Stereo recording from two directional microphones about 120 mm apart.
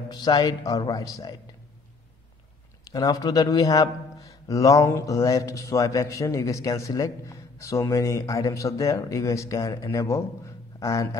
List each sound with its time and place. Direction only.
0.1 s a man's voice: 35° left (ahead or behind)
0.7 s a man's voice: 30° left (ahead or behind)
2.9 s a man's voice: 30° left (ahead or behind)